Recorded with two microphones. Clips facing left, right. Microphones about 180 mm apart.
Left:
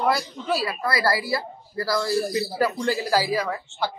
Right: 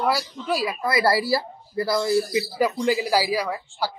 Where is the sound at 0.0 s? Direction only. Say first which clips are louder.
Even; 10° right (ahead or behind).